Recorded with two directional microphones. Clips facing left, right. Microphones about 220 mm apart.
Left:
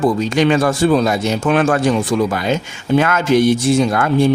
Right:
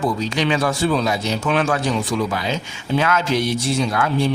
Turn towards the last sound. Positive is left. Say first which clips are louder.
# left 6 dB
turn(degrees=50)  # may be behind; listen again after turning